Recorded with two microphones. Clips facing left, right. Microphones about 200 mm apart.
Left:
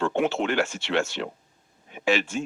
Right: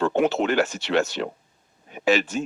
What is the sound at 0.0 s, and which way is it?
Speech, 40° right (ahead or behind).